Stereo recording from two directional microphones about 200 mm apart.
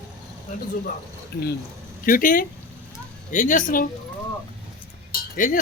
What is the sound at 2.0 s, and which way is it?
Speech, 45° left (ahead or behind).